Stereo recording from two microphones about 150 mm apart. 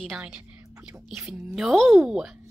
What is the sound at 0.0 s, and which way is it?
Speech, centre (ahead or behind).